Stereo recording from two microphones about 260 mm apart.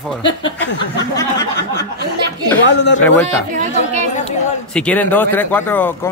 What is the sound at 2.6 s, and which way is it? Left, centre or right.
Speech, left.